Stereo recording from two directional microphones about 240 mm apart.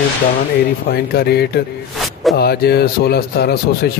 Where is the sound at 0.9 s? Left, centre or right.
Left.